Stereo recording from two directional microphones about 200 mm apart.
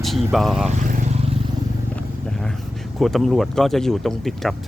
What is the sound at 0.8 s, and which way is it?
Vehicle, 40° right (ahead or behind).